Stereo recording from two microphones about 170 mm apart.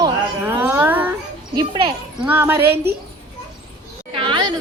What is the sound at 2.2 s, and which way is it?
Speech, 10° right (ahead or behind).